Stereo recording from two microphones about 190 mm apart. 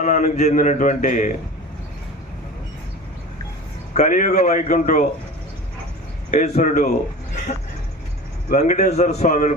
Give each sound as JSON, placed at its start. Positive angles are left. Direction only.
{"t": 0.0, "sound": "speech", "side_deg": 40}
{"t": 3.9, "sound": "speech", "side_deg": 40}
{"t": 6.3, "sound": "speech", "side_deg": 40}
{"t": 8.4, "sound": "speech", "side_deg": 40}